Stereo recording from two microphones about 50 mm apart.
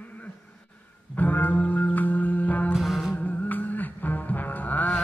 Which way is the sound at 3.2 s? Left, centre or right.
Left.